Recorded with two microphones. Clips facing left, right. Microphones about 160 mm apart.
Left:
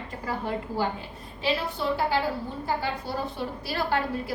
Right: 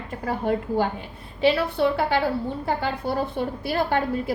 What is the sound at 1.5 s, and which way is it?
Speech, 65° right (ahead or behind).